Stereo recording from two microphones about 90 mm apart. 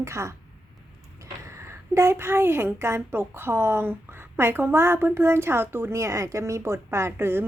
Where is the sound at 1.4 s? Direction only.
30° right (ahead or behind).